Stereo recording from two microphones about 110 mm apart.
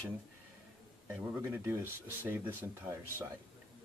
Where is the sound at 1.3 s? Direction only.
20° right (ahead or behind).